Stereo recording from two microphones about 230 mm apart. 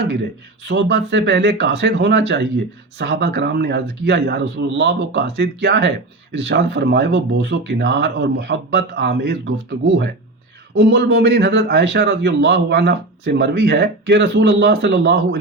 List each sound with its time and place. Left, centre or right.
0.6 s a man's voice: right